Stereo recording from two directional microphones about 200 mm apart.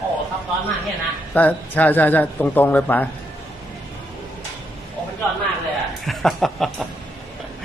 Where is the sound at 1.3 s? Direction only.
10° left (ahead or behind).